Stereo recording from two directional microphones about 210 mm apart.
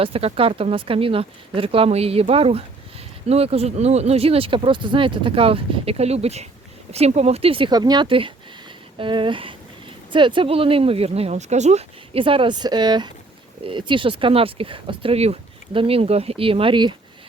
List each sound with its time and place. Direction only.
0.0 s speech: 25° right (ahead or behind)